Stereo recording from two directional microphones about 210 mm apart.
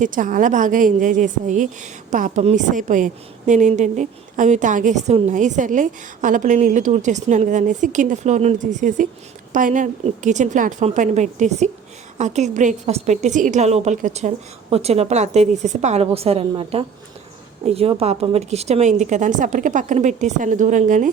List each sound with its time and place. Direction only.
0.0 s a woman's voice: 40° right (ahead or behind)